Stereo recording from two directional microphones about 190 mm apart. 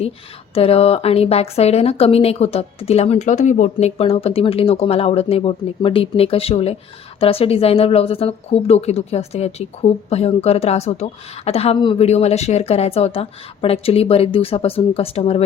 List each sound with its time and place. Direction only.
0.5 s a woman's voice: 30° left (ahead or behind)